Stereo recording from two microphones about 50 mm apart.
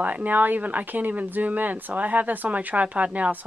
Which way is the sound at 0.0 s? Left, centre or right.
Right.